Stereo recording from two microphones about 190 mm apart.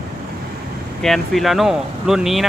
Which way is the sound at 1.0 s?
Centre (ahead or behind).